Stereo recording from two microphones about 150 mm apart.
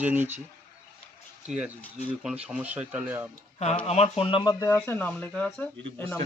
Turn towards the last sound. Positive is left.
turn(degrees=20)  # may be behind; listen again after turning